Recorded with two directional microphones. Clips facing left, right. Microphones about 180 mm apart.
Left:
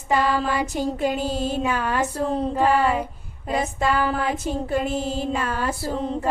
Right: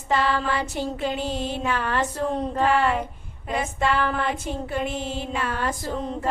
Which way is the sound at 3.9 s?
10° left (ahead or behind).